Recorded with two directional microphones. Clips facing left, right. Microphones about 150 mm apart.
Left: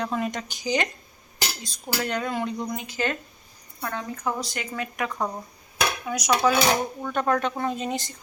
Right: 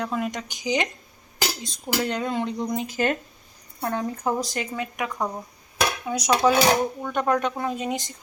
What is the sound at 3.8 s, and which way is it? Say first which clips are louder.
Speech: right 5 dB; 35° right (ahead or behind).